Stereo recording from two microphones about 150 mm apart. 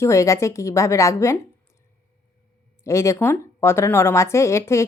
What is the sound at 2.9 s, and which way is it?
Speech, 20° left (ahead or behind).